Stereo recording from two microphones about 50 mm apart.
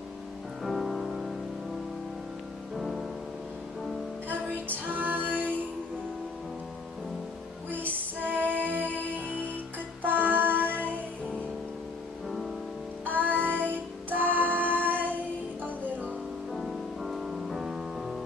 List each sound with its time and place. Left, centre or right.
0.7 s music: centre
2.8 s music: centre
4.8 s music: right
5.3 s music: left
7.9 s music: right
13.0 s music: right
16.5 s music: centre